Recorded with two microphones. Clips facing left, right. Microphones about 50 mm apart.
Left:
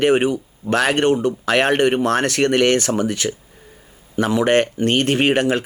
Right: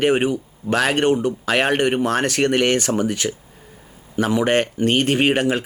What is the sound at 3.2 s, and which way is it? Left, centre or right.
Speech, centre.